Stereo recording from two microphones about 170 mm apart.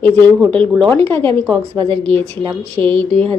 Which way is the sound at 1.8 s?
35° right (ahead or behind).